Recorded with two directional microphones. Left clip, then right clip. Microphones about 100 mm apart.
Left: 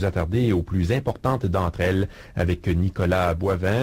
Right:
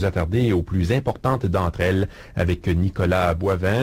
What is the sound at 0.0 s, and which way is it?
Speech, 25° left (ahead or behind).